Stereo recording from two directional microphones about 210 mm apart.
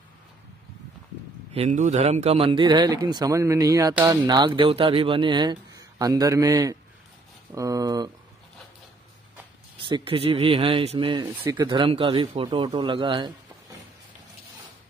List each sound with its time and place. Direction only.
1.5 s speech: 30° right (ahead or behind)
9.8 s speech: 25° right (ahead or behind)